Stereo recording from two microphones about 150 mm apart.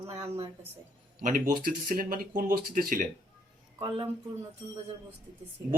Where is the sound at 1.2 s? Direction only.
65° right (ahead or behind).